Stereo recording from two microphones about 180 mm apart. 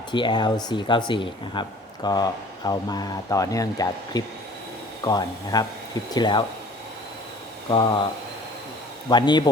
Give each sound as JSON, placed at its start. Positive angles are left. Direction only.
{"t": 0.1, "sound": "speech", "side_deg": 25}
{"t": 7.7, "sound": "speech", "side_deg": 25}
{"t": 9.0, "sound": "speech", "side_deg": 25}